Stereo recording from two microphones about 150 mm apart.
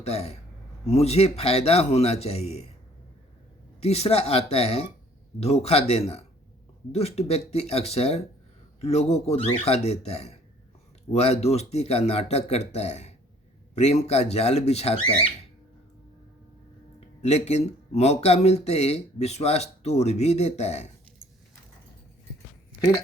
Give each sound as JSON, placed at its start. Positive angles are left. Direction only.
{"t": 0.0, "sound": "speech", "side_deg": 45}
{"t": 3.8, "sound": "speech", "side_deg": 45}
{"t": 17.2, "sound": "speech", "side_deg": 45}